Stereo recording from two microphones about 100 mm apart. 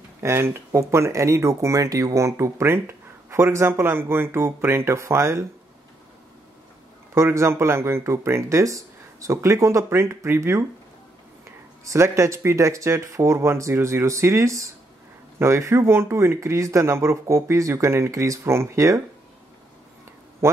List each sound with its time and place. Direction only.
0.2 s speech: 25° right (ahead or behind)
7.2 s speech: 30° right (ahead or behind)
11.8 s speech: 30° right (ahead or behind)